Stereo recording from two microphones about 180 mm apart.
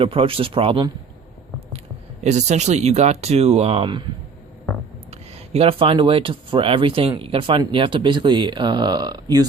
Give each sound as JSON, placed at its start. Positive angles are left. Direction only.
{"t": 0.0, "sound": "speech", "side_deg": -30}
{"t": 2.2, "sound": "speech", "side_deg": -40}
{"t": 5.1, "sound": "speech", "side_deg": -35}